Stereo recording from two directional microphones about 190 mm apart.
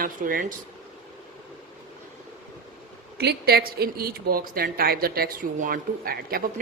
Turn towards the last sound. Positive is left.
turn(degrees=-50)  # may be behind; listen again after turning